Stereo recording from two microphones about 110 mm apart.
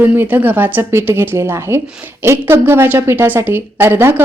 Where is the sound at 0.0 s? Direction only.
15° right (ahead or behind).